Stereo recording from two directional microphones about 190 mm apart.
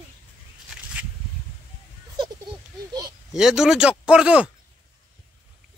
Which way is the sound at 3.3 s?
5° right (ahead or behind).